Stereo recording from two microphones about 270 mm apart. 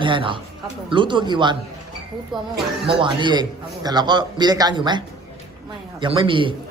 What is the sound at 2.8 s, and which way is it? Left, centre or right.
A man's voice, centre.